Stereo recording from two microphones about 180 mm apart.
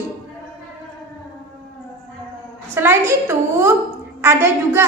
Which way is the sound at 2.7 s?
15° right (ahead or behind).